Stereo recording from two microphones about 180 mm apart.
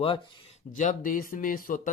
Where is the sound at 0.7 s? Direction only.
45° left (ahead or behind).